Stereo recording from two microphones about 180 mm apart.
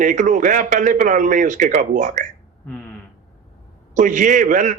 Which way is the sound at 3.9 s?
45° right (ahead or behind).